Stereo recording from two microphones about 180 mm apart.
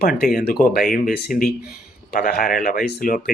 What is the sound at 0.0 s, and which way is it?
Speech, 60° left (ahead or behind).